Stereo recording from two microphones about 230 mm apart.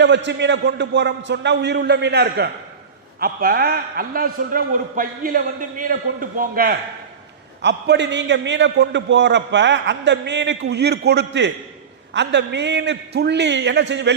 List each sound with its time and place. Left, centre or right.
0.0 s a man's voice: right
7.6 s a man's voice: right